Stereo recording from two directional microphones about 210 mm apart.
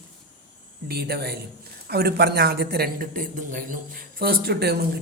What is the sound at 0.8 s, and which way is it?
A man's voice, 50° right (ahead or behind).